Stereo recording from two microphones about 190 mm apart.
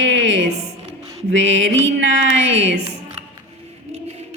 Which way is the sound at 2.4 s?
35° right (ahead or behind).